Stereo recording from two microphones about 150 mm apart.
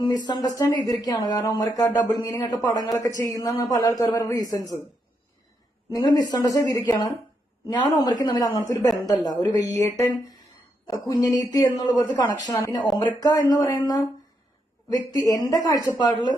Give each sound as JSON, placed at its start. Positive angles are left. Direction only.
{"t": 0.0, "sound": "speech", "side_deg": 30}
{"t": 5.9, "sound": "speech", "side_deg": 25}